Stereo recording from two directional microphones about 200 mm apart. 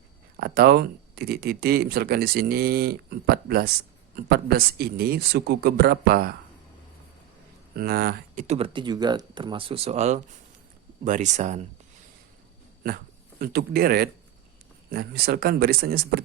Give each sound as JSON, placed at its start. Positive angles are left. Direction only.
{"t": 0.3, "sound": "speech", "side_deg": -50}
{"t": 7.8, "sound": "speech", "side_deg": -50}
{"t": 8.4, "sound": "speech", "side_deg": -25}
{"t": 13.4, "sound": "speech", "side_deg": -50}